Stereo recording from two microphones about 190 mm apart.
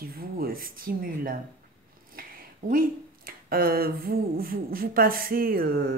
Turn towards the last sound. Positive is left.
turn(degrees=-50)  # may be behind; listen again after turning